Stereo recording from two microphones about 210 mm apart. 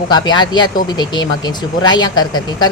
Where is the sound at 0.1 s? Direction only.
20° left (ahead or behind).